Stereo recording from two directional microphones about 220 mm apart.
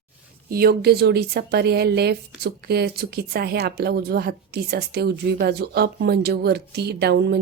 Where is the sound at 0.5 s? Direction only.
45° right (ahead or behind).